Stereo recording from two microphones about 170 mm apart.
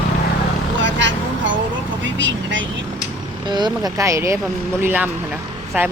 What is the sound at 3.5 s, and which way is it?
Speech, 25° right (ahead or behind).